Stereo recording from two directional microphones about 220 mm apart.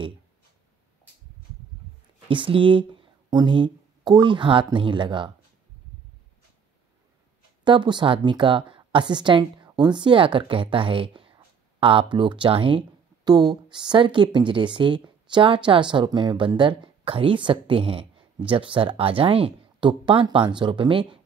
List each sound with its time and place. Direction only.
2.2 s speech: 25° right (ahead or behind)
7.6 s speech: 20° right (ahead or behind)